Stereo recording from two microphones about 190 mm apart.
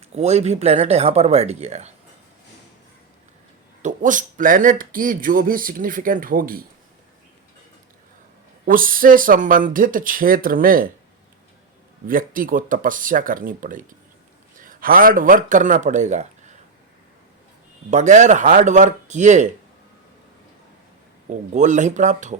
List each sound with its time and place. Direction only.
0.1 s speech: 35° right (ahead or behind)
3.8 s speech: 45° right (ahead or behind)
8.6 s speech: 45° right (ahead or behind)
12.0 s speech: 45° right (ahead or behind)
17.9 s speech: 40° right (ahead or behind)
21.2 s speech: 40° right (ahead or behind)